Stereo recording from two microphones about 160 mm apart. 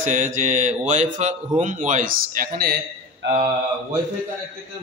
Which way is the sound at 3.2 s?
90° right.